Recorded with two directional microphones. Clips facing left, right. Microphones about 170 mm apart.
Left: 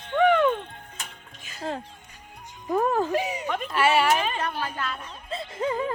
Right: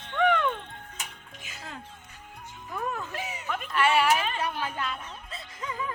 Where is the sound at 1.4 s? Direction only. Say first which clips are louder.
Even; 20° right (ahead or behind).